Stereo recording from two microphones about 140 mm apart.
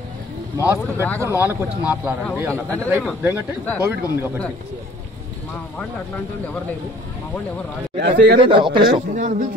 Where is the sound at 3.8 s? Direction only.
15° right (ahead or behind).